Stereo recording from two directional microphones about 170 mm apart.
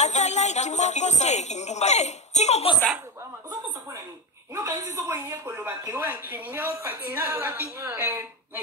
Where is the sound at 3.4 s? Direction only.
25° right (ahead or behind).